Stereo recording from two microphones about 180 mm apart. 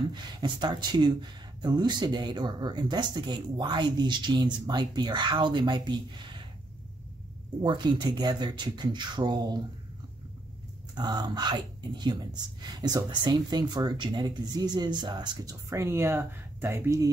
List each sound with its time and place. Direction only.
0.1 s speech: 25° right (ahead or behind)
7.6 s speech: 25° right (ahead or behind)
11.0 s speech: 20° right (ahead or behind)